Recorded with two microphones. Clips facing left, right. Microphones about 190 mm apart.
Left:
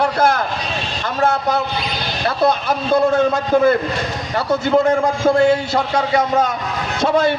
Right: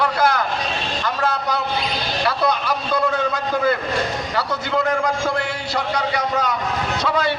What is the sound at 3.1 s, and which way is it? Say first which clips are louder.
A man's voice: left 7 dB; 50° left (ahead or behind).